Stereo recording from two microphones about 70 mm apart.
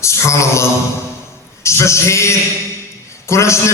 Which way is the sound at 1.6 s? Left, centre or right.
Left.